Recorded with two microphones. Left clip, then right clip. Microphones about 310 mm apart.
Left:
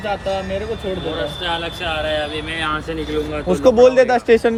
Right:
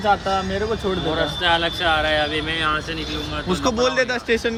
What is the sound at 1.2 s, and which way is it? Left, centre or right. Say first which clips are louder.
Speech: right 3 dB; right.